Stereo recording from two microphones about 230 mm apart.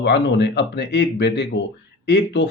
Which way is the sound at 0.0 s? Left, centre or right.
Left.